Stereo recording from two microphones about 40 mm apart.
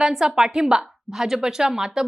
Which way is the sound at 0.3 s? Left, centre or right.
Centre.